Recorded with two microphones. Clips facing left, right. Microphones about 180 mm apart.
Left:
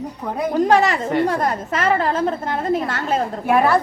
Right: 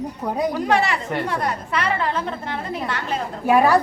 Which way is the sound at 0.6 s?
40° left (ahead or behind).